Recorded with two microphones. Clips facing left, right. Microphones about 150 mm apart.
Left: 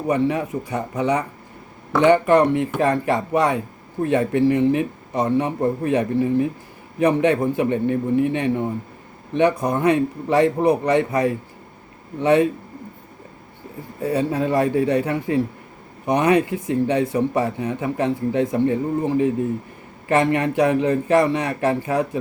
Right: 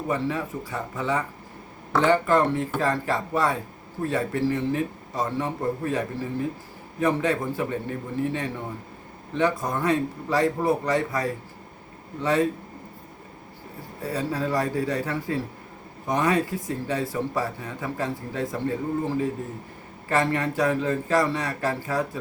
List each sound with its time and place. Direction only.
0.1 s speech: 20° left (ahead or behind)
14.0 s speech: 20° left (ahead or behind)